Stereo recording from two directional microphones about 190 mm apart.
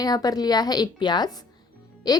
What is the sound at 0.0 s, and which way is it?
A woman's voice, 20° left (ahead or behind).